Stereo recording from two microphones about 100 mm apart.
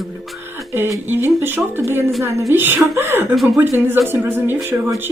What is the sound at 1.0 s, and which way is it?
Speech, 20° right (ahead or behind).